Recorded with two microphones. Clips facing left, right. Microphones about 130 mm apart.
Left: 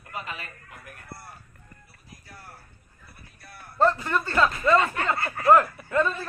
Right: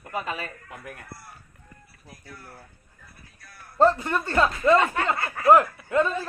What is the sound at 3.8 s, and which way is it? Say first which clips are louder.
A man's voice: right 2 dB; 20° right (ahead or behind).